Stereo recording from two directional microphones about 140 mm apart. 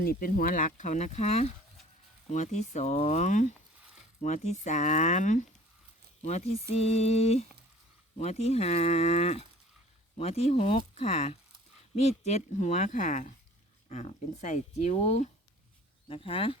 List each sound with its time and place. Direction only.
0.0 s speech: 90° left; by 5.5 s 60° left (ahead or behind)
6.2 s speech: 50° left (ahead or behind)
16.0 s speech: 40° left (ahead or behind)